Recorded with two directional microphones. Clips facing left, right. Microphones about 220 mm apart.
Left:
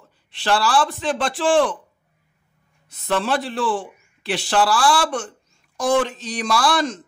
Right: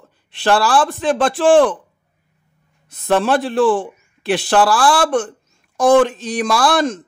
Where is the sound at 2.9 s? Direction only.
50° right (ahead or behind).